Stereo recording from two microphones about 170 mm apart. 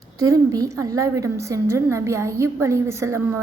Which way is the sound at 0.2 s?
20° right (ahead or behind).